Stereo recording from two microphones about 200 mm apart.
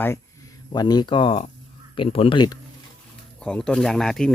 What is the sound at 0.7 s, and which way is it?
Speech, 20° left (ahead or behind).